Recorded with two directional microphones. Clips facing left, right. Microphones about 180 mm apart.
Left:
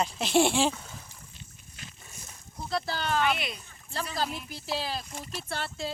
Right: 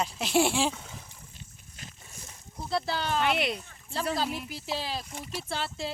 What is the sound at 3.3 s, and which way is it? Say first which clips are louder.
Speech: right 7 dB; 70° right (ahead or behind).